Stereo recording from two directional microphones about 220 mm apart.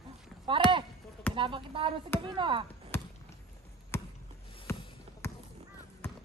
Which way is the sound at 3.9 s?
10° left (ahead or behind).